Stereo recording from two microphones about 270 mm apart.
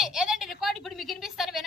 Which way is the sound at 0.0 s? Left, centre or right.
Centre.